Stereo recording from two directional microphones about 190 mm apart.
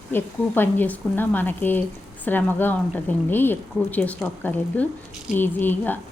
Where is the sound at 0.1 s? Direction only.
10° left (ahead or behind).